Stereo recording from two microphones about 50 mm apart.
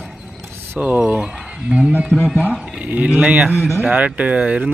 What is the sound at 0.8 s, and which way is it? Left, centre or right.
Speech, right.